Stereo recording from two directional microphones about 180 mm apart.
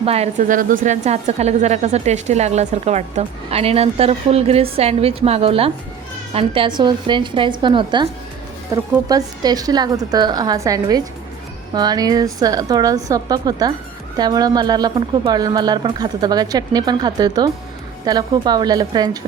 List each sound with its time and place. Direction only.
0.0 s a woman's voice: 35° right (ahead or behind)